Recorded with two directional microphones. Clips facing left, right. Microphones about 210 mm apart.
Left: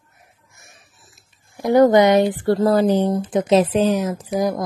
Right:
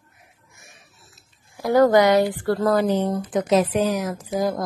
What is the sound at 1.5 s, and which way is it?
A woman's voice, 20° left (ahead or behind).